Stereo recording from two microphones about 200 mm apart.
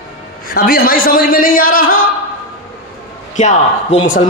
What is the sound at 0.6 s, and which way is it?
A man's voice, 50° left (ahead or behind).